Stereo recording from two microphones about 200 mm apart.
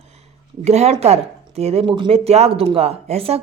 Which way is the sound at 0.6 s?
35° right (ahead or behind).